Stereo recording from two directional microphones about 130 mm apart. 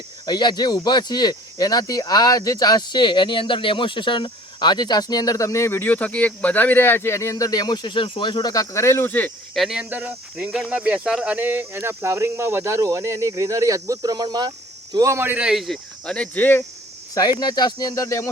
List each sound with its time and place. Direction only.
0.3 s speech: 35° left (ahead or behind); by 9.3 s 15° left (ahead or behind)
9.6 s speech: 5° right (ahead or behind); by 14.5 s 35° right (ahead or behind)
14.9 s speech: 20° right (ahead or behind)
15.4 s speech: centre (ahead or behind)
17.2 s speech: 30° left (ahead or behind)